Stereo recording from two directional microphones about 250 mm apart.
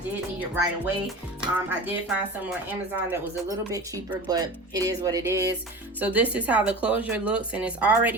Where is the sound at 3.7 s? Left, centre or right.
Centre.